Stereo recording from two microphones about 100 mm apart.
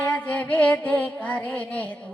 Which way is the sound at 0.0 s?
15° left (ahead or behind).